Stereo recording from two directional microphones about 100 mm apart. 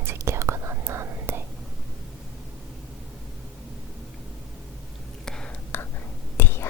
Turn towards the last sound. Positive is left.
turn(degrees=20)  # may be behind; listen again after turning